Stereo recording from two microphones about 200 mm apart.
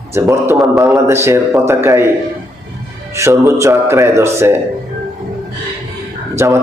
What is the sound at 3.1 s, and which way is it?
Speech, 15° right (ahead or behind).